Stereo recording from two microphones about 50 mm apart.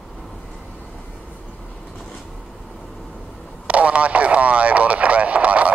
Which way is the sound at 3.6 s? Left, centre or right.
Right.